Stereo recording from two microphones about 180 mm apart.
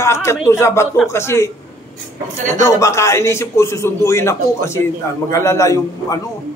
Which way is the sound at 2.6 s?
15° left (ahead or behind).